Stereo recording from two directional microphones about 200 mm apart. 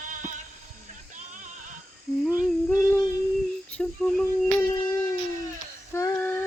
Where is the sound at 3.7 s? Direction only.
5° left (ahead or behind).